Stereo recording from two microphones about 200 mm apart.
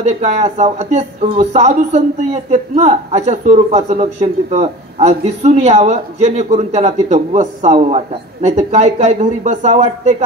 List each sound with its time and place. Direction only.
0.0 s speech: 35° right (ahead or behind)